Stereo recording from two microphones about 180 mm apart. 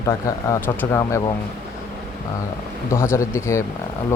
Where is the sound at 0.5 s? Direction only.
15° left (ahead or behind).